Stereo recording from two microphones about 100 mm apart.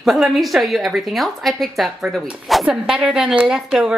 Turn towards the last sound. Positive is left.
turn(degrees=-5)  # may be behind; listen again after turning